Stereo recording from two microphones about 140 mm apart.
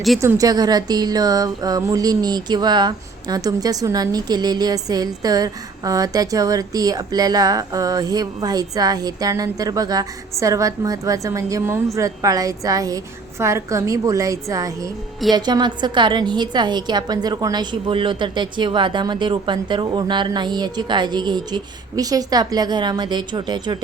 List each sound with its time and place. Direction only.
0.2 s a woman's voice: 20° right (ahead or behind)